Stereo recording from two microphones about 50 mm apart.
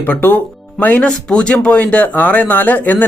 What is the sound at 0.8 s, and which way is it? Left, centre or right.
Speech, left.